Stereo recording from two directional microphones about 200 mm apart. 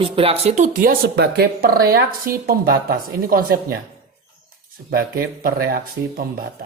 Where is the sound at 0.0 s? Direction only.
30° right (ahead or behind); by 3.8 s 45° right (ahead or behind).